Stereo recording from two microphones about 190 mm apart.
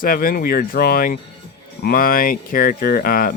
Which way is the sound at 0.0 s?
50° left (ahead or behind).